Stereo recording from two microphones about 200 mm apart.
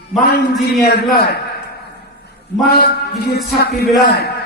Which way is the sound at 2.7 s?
50° left (ahead or behind).